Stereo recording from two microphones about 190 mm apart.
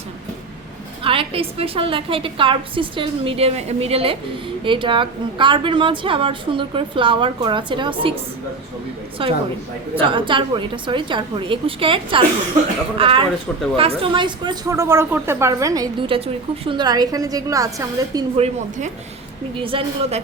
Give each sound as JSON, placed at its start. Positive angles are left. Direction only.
{"t": 1.0, "sound": "speech", "side_deg": -30}
{"t": 9.2, "sound": "speech", "side_deg": -30}
{"t": 18.3, "sound": "a woman's voice", "side_deg": -35}